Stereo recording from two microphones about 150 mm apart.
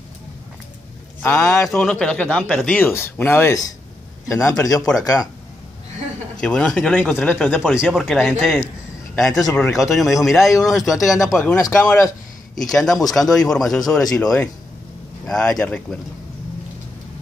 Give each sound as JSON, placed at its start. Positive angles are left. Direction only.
{"t": 1.2, "sound": "speech", "side_deg": 5}
{"t": 4.8, "sound": "speech", "side_deg": 0}
{"t": 6.4, "sound": "speech", "side_deg": 5}
{"t": 11.3, "sound": "speech", "side_deg": 15}